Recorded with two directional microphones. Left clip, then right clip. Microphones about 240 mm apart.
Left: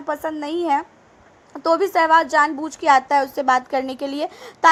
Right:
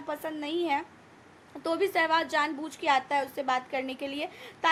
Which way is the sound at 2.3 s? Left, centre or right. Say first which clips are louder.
Left 11 dB; left.